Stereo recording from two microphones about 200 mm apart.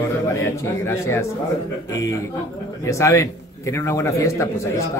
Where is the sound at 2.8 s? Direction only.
15° left (ahead or behind).